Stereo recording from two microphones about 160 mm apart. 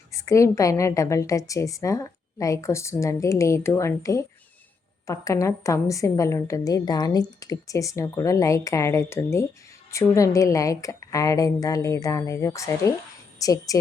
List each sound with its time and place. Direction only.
0.1 s a woman's voice: 20° left (ahead or behind)